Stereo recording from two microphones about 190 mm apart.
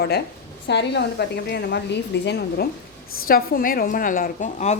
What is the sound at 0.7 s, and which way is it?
A woman's voice, 65° left (ahead or behind).